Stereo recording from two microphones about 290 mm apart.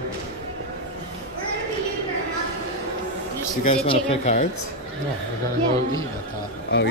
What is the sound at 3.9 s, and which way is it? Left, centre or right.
Speech, left.